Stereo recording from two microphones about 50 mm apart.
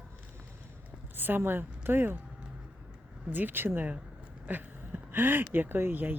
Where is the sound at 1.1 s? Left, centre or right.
Right.